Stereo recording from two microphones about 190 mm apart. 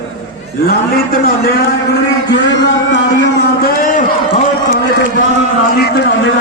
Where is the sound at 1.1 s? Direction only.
55° left (ahead or behind).